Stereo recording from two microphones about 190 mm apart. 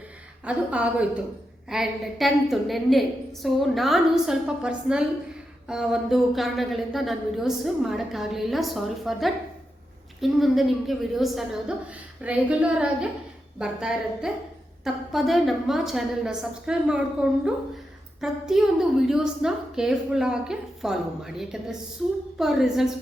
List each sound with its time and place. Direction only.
0.4 s a woman's voice: 5° right (ahead or behind)